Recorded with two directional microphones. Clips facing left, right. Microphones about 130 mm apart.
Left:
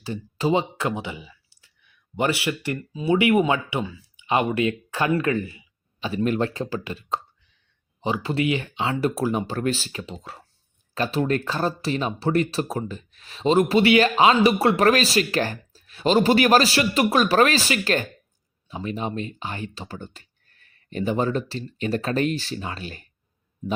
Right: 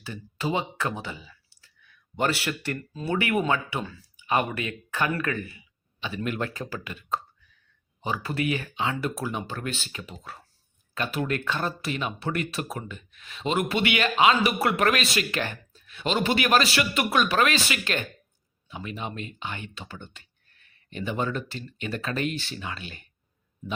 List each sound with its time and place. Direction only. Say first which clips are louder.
0.0 s speech: left 6 dB; 30° left (ahead or behind)
0.9 s clicking: left 4 dB; 15° left (ahead or behind)
2.1 s speech: left 3 dB; 10° left (ahead or behind)
3.2 s speech: left 5 dB; 20° left (ahead or behind)
4.3 s speech: left 5 dB; 25° left (ahead or behind)